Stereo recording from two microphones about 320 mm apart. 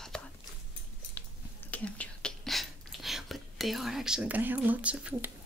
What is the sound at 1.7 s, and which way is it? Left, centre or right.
Whispering, centre.